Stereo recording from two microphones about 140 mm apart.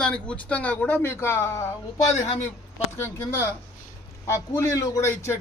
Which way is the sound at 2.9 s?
20° left (ahead or behind).